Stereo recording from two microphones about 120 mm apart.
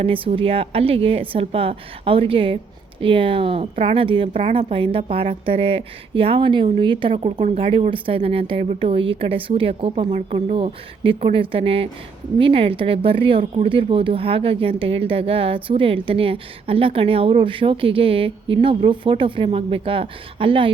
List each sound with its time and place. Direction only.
0.0 s speech: 50° right (ahead or behind)
7.3 s speech: 75° right (ahead or behind)
7.5 s speech: 50° right (ahead or behind)